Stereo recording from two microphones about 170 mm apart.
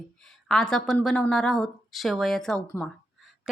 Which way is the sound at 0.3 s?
Centre (ahead or behind).